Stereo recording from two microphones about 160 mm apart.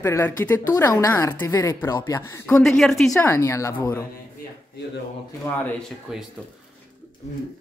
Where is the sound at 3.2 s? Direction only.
15° left (ahead or behind).